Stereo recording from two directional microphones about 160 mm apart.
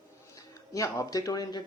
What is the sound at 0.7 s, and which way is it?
Speech, 20° left (ahead or behind).